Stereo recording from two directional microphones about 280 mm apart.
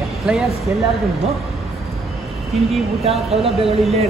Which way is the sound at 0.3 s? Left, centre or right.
Centre.